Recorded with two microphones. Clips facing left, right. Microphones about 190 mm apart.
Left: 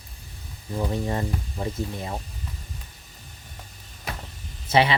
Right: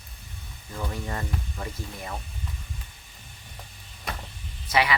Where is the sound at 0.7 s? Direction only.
25° left (ahead or behind).